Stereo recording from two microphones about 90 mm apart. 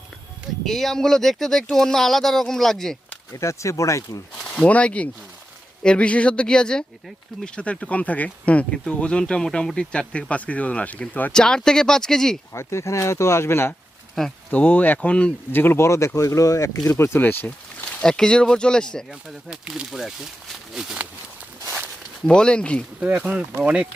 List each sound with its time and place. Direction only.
0.6 s speech: 5° left (ahead or behind)
3.3 s speech: 35° left (ahead or behind)
4.4 s speech: 10° left (ahead or behind)
12.5 s speech: 30° left (ahead or behind)
14.5 s speech: 20° left (ahead or behind)
18.0 s speech: 5° left (ahead or behind)
19.5 s speech: 10° right (ahead or behind)
22.3 s speech: 10° left (ahead or behind)
23.0 s speech: 10° right (ahead or behind)